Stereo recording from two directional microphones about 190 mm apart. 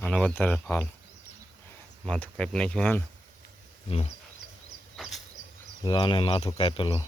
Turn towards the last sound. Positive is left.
turn(degrees=25)  # may be behind; listen again after turning